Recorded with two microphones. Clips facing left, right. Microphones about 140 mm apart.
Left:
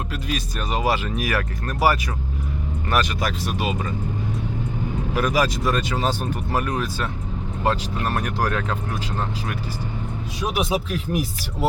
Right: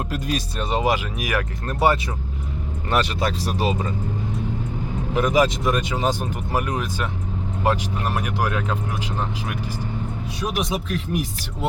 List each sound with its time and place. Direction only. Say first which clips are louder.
0.1 s music: right 2 dB; 40° right (ahead or behind)
0.7 s speech: right 1 dB; 20° right (ahead or behind)
5.1 s speech: right 3 dB; 20° right (ahead or behind)
10.4 s speech: left 2 dB; 5° left (ahead or behind)